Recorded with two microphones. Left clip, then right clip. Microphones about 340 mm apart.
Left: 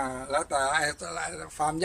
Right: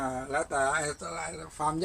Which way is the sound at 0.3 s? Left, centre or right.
Left.